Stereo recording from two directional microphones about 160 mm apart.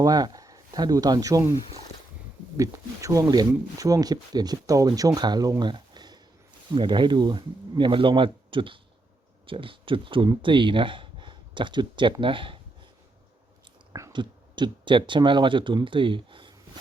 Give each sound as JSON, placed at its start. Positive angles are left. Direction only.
{"t": 0.0, "sound": "speech", "side_deg": -25}
{"t": 13.9, "sound": "speech", "side_deg": -25}